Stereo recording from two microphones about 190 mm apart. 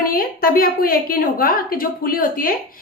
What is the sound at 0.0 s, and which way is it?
A woman's voice, 50° left (ahead or behind).